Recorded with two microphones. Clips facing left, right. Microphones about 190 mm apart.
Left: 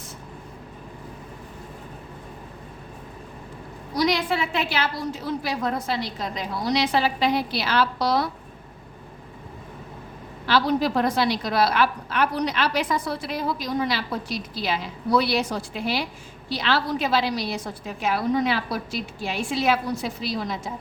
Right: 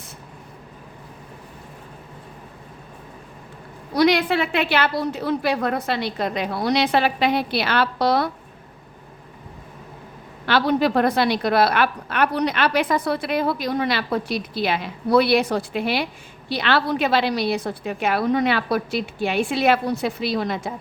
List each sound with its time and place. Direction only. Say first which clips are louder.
3.9 s a woman's voice: right 5 dB; 65° right (ahead or behind)
10.4 s a woman's voice: right 2 dB; 60° right (ahead or behind)